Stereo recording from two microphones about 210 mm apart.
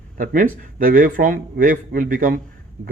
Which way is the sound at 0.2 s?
40° right (ahead or behind).